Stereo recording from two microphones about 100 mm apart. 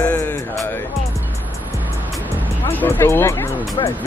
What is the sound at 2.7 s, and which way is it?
Speech, 20° left (ahead or behind).